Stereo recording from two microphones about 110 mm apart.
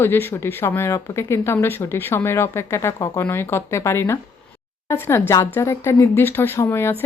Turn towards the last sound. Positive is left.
turn(degrees=25)  # may be behind; listen again after turning